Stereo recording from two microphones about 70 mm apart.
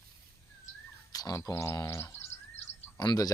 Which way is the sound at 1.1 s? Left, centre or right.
Left.